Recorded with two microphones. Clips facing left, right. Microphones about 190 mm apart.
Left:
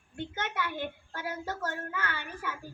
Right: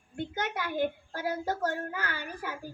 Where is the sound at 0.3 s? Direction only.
40° right (ahead or behind).